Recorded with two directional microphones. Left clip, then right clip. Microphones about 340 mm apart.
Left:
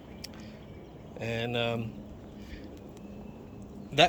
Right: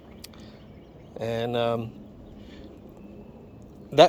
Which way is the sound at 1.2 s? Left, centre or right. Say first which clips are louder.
Right 5 dB; centre.